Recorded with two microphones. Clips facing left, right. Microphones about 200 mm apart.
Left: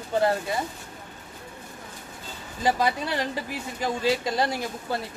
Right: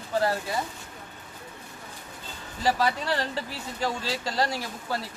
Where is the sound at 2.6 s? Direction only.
15° left (ahead or behind).